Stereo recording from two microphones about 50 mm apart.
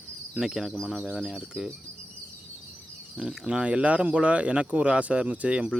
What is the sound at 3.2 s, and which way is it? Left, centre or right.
Speech, centre.